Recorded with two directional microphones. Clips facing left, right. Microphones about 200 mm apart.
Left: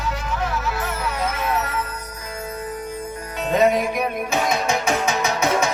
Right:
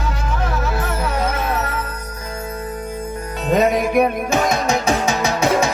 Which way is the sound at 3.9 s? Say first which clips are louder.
Right 7 dB; 50° right (ahead or behind).